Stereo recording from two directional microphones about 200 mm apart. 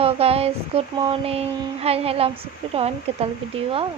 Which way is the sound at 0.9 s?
25° right (ahead or behind).